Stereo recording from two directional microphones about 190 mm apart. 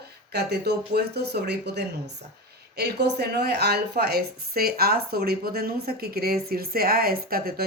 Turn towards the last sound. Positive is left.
turn(degrees=-55)  # may be behind; listen again after turning